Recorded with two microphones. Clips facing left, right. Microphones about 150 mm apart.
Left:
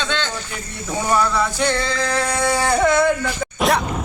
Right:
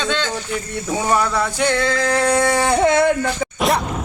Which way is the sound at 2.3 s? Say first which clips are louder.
Right 2 dB; 20° right (ahead or behind).